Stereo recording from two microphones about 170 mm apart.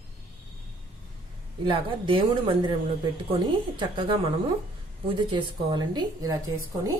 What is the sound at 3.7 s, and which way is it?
A woman's voice, 30° right (ahead or behind).